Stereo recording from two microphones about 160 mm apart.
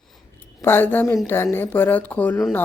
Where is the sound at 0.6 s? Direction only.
15° left (ahead or behind).